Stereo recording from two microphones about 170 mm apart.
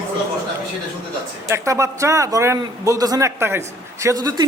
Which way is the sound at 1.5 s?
15° right (ahead or behind).